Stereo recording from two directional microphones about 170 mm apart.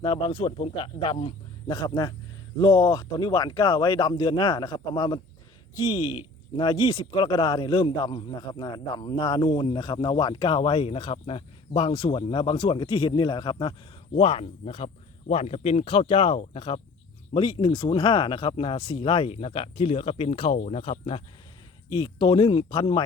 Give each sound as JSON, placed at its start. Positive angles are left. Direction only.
{"t": 0.0, "sound": "a man's voice", "side_deg": 30}
{"t": 14.2, "sound": "a man's voice", "side_deg": 35}